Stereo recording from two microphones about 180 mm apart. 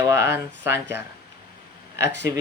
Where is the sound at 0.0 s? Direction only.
15° right (ahead or behind).